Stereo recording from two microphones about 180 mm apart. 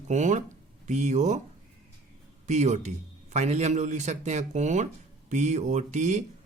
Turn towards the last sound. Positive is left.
turn(degrees=-40)  # may be behind; listen again after turning